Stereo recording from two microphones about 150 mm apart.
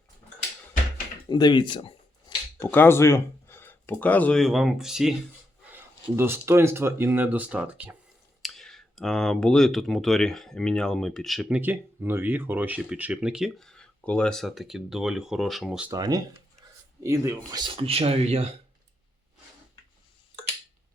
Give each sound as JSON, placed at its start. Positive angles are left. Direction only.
{"t": 1.3, "sound": "speech", "side_deg": 30}
{"t": 2.6, "sound": "speech", "side_deg": 15}
{"t": 5.7, "sound": "speech", "side_deg": -15}
{"t": 8.4, "sound": "speech", "side_deg": 0}
{"t": 15.9, "sound": "speech", "side_deg": -25}